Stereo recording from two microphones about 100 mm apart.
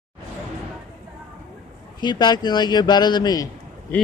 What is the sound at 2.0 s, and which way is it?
A man's voice, 45° left (ahead or behind).